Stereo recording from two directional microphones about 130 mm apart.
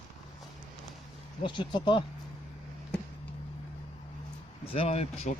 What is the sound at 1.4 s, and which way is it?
Speech, 35° left (ahead or behind).